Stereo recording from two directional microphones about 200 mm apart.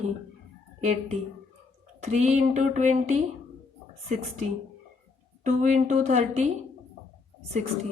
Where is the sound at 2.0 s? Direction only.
35° right (ahead or behind).